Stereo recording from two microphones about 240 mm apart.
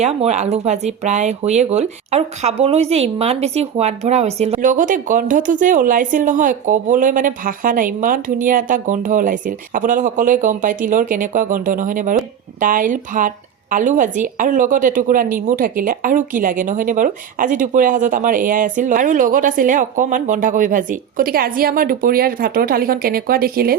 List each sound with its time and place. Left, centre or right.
0.0 s speech: right